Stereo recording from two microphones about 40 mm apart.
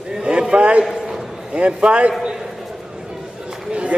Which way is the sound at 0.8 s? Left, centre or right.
Centre.